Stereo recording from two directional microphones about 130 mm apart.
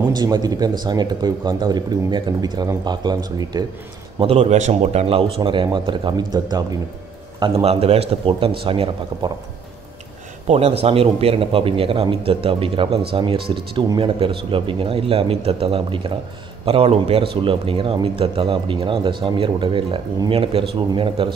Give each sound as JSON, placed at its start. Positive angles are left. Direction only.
{"t": 0.1, "sound": "speech", "side_deg": -30}
{"t": 4.2, "sound": "speech", "side_deg": -50}
{"t": 7.3, "sound": "speech", "side_deg": -45}
{"t": 10.5, "sound": "speech", "side_deg": -55}